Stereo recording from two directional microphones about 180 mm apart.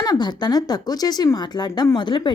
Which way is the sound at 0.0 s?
25° left (ahead or behind).